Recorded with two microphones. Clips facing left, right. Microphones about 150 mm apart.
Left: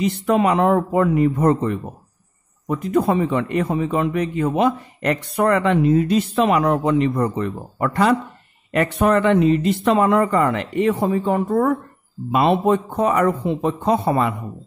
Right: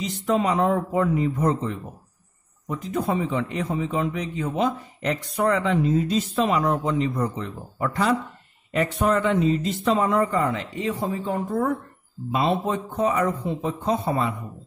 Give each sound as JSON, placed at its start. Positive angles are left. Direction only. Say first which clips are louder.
{"t": 0.0, "sound": "a man's voice", "louder": "left 5 dB", "side_deg": 65}